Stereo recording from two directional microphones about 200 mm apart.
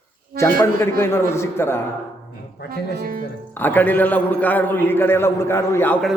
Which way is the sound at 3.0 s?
45° right (ahead or behind).